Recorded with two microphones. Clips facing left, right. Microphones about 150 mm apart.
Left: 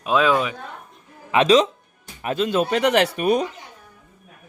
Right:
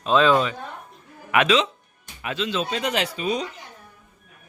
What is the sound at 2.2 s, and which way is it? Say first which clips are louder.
Speech: left 5 dB; 45° left (ahead or behind).